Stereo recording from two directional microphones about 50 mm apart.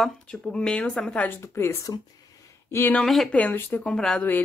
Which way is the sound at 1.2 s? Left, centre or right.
Left.